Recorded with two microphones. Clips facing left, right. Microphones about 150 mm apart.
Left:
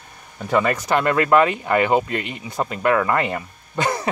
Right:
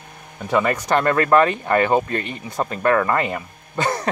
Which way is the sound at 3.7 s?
15° left (ahead or behind).